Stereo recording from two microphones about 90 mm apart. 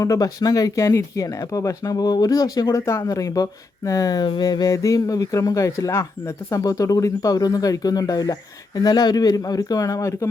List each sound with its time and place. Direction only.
0.0 s speech: 40° left (ahead or behind)
2.7 s speech: 30° left (ahead or behind)